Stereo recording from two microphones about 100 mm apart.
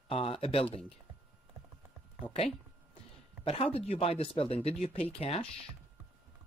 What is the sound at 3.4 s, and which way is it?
Speech, 75° left (ahead or behind).